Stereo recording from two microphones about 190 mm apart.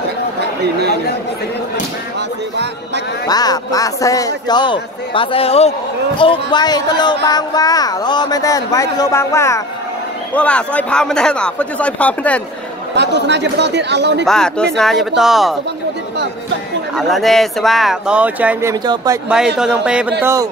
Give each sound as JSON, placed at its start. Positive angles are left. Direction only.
{"t": 3.3, "sound": "speech", "side_deg": 20}
{"t": 12.9, "sound": "speech", "side_deg": -65}
{"t": 14.2, "sound": "speech", "side_deg": 5}
{"t": 16.9, "sound": "speech", "side_deg": 0}
{"t": 19.2, "sound": "speech", "side_deg": -5}